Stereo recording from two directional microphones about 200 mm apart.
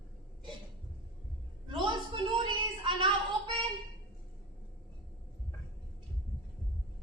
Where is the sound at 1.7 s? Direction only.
25° right (ahead or behind).